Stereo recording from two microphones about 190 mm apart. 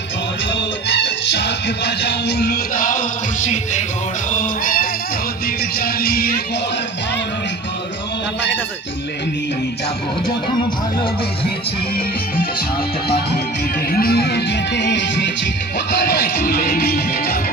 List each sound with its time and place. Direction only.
0.5 s music: 65° left (ahead or behind)
11.9 s music: 50° left (ahead or behind)